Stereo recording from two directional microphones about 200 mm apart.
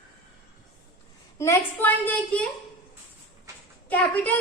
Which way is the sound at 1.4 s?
10° left (ahead or behind).